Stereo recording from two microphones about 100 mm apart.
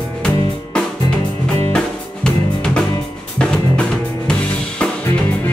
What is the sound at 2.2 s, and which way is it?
Music, 5° left (ahead or behind).